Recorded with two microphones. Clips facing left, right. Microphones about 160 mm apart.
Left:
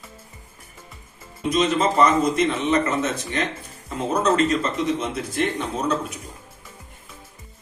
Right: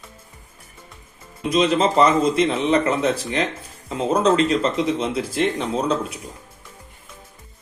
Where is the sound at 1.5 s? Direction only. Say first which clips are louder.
Right 2 dB; 30° right (ahead or behind).